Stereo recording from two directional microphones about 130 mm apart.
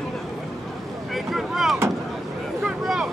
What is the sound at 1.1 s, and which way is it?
Boat, centre (ahead or behind).